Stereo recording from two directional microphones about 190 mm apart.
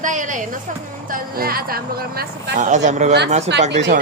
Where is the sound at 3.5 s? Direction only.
65° right (ahead or behind).